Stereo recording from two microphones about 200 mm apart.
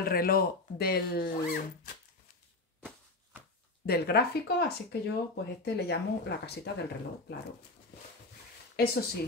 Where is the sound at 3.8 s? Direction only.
50° left (ahead or behind).